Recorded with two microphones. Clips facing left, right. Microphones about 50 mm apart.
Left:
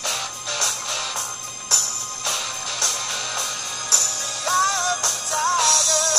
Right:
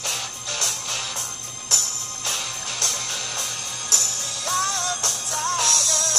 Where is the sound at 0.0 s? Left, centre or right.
Left.